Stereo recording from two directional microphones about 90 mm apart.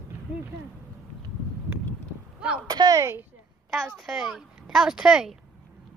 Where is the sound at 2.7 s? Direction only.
45° right (ahead or behind).